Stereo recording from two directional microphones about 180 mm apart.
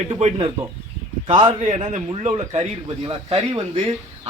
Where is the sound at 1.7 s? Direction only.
40° right (ahead or behind).